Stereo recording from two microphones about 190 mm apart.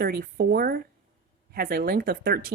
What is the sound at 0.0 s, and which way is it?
Speech, 50° right (ahead or behind).